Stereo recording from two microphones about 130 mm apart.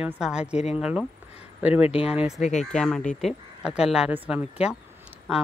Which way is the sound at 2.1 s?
5° right (ahead or behind).